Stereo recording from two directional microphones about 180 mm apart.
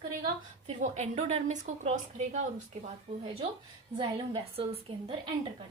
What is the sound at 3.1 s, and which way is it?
A woman's voice, 35° right (ahead or behind).